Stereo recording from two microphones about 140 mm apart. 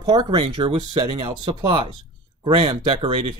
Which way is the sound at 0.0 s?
30° right (ahead or behind).